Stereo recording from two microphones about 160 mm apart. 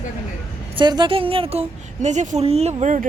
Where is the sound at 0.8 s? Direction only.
30° right (ahead or behind).